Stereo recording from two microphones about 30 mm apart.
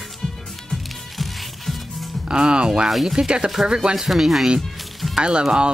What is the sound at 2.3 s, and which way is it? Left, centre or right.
Speech, right.